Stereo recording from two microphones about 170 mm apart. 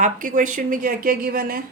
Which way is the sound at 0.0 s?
50° right (ahead or behind).